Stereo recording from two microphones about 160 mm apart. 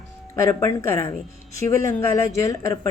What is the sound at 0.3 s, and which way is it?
Speech, 20° left (ahead or behind).